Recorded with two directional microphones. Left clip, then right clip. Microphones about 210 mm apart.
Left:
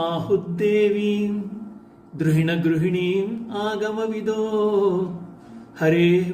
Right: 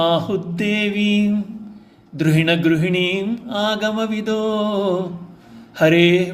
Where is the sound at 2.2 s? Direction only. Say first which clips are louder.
Right 5 dB; 35° right (ahead or behind).